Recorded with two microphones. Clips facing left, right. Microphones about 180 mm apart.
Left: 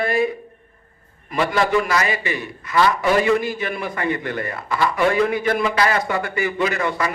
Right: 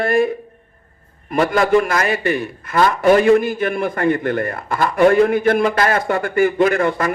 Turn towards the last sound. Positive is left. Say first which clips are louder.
# right 6 dB
turn(degrees=-50)  # may be behind; listen again after turning